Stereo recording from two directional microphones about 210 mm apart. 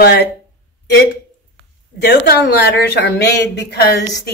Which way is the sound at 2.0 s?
50° left (ahead or behind).